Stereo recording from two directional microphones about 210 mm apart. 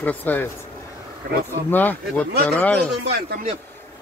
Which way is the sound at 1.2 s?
50° right (ahead or behind).